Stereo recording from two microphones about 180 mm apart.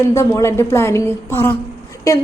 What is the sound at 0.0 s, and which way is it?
A woman's voice, 15° left (ahead or behind).